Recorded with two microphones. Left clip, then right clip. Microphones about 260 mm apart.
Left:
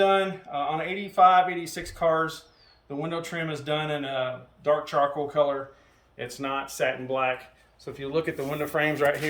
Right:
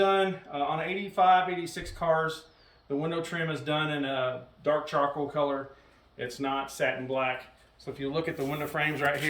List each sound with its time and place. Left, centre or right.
0.0 s speech: centre